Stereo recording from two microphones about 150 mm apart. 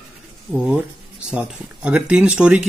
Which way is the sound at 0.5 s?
5° right (ahead or behind).